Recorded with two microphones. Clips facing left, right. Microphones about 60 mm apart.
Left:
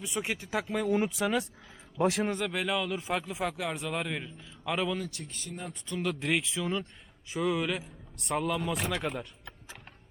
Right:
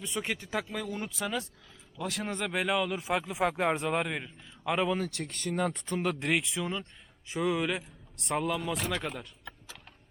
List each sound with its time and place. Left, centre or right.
0.0 s a man's voice: centre
2.5 s a man's voice: centre
3.5 s a man's voice: right; by 4.9 s centre
4.9 s speech: right
5.8 s speech: right
6.2 s a man's voice: centre